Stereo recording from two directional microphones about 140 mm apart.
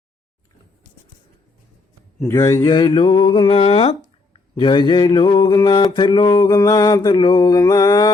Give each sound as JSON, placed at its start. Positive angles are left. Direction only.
{"t": 2.2, "sound": "mantra", "side_deg": 20}